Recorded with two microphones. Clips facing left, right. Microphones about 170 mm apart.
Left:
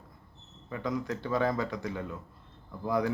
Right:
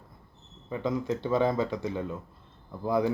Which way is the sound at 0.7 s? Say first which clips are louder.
Right 4 dB; 25° right (ahead or behind).